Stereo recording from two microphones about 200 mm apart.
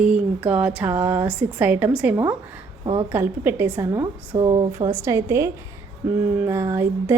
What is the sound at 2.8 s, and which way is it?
Speech, 25° right (ahead or behind).